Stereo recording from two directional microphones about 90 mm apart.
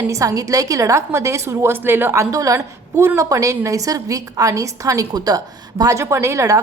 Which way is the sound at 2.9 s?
25° right (ahead or behind).